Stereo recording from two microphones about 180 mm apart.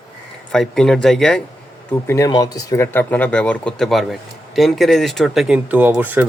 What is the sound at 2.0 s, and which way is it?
Speech, 15° left (ahead or behind).